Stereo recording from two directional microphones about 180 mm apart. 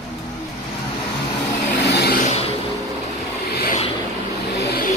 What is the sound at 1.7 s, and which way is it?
Vehicle, 60° left (ahead or behind).